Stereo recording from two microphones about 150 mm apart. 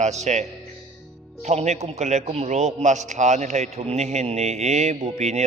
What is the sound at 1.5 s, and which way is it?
A man's voice, 50° right (ahead or behind).